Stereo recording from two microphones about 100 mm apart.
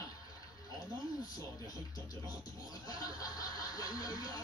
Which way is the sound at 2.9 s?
40° left (ahead or behind).